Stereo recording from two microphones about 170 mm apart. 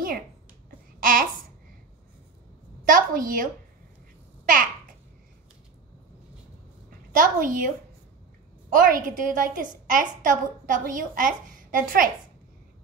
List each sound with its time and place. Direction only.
0.7 s babbling: 55° right (ahead or behind)
2.8 s a sound: 55° right (ahead or behind)
7.1 s a woman's voice: 50° right (ahead or behind)
8.7 s a woman's voice: 55° right (ahead or behind)